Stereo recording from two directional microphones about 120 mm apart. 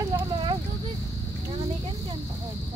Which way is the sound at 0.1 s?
40° right (ahead or behind).